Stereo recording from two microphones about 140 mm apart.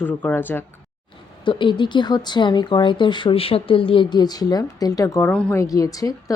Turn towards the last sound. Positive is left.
turn(degrees=25)  # may be behind; listen again after turning